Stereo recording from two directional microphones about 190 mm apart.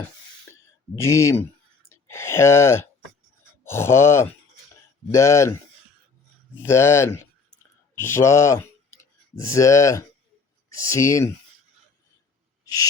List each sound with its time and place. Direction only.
0.9 s speech: 15° left (ahead or behind)
6.6 s speech: 15° left (ahead or behind)
12.6 s a sound: 20° left (ahead or behind)